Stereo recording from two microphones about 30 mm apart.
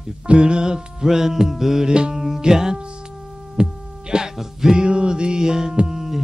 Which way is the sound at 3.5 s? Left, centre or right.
Right.